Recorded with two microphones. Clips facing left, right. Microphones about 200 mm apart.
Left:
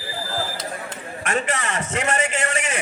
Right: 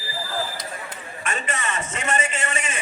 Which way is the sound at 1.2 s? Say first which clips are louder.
Left 5 dB; 70° left (ahead or behind).